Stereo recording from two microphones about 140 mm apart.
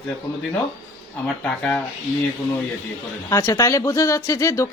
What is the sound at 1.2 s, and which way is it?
Speech, 5° left (ahead or behind).